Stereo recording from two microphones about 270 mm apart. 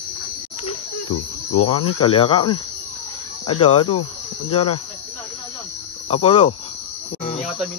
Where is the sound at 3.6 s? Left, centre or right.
Centre.